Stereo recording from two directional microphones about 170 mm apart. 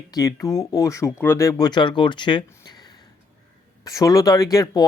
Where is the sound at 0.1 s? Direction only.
20° left (ahead or behind).